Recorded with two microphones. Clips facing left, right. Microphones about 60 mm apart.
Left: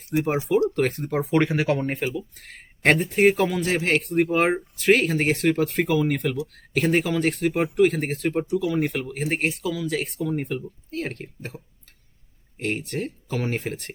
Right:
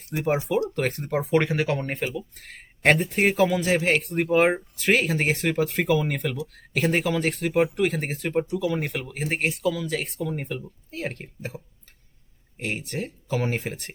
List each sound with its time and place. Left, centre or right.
0.1 s speech: centre
0.7 s speech: centre